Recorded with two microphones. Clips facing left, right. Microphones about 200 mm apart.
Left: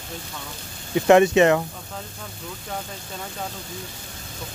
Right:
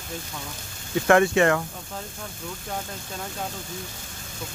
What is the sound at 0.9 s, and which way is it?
Speech, 20° left (ahead or behind).